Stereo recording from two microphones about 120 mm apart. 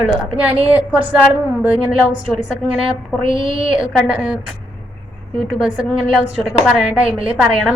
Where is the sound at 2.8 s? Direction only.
45° right (ahead or behind).